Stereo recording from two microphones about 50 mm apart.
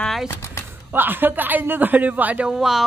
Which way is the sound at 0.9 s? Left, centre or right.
Right.